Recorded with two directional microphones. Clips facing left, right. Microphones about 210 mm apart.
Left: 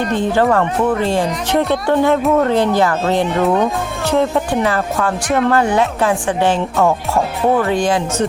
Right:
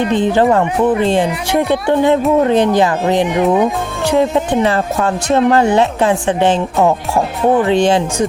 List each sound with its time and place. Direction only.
0.1 s speech: 20° right (ahead or behind)